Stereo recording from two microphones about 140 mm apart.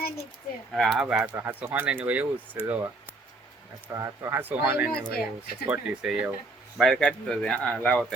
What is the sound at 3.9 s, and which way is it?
Speech, 20° right (ahead or behind).